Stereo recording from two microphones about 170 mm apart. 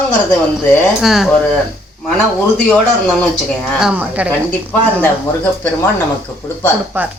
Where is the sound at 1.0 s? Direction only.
Centre (ahead or behind).